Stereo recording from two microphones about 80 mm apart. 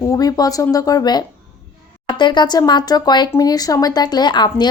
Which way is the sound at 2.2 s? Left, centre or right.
Left.